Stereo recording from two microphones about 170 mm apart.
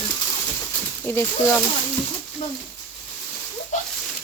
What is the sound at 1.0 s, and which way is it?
Speech, 15° left (ahead or behind).